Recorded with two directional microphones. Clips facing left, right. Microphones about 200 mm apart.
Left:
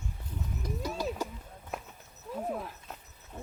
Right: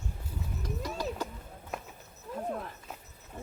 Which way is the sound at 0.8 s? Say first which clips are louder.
Left 1 dB; 5° left (ahead or behind).